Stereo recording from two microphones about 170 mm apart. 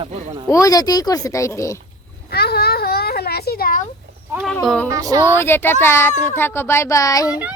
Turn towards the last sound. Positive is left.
turn(degrees=20)  # may be behind; listen again after turning